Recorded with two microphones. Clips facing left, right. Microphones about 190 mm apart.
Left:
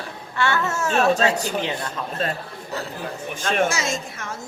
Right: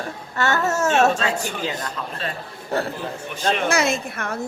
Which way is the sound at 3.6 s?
60° right (ahead or behind).